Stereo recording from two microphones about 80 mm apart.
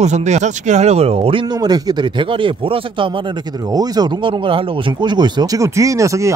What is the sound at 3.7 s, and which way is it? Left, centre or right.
Speech, right.